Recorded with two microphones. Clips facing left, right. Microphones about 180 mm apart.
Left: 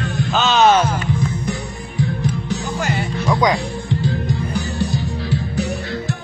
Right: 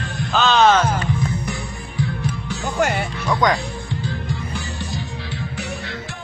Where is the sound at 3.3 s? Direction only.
10° left (ahead or behind).